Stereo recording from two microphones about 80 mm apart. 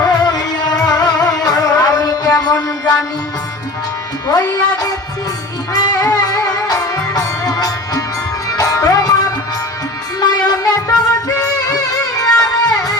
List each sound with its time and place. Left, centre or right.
0.9 s music: left
4.3 s music: left
10.2 s music: left